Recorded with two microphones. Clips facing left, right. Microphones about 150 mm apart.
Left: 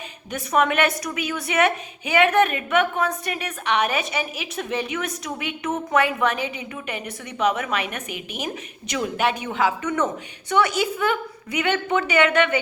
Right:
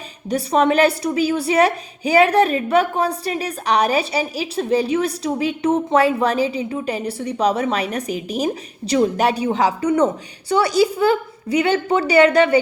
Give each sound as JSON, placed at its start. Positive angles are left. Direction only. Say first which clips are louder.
{"t": 0.3, "sound": "a woman's voice", "louder": "right 5 dB", "side_deg": -35}